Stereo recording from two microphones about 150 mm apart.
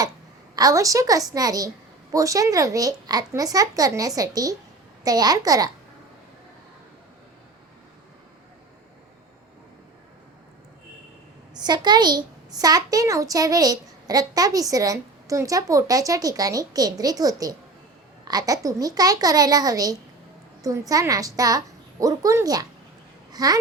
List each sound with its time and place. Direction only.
0.5 s a child's voice: 25° right (ahead or behind)
11.6 s a child's voice: 30° right (ahead or behind)